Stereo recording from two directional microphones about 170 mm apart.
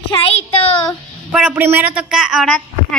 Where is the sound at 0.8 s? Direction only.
5° right (ahead or behind).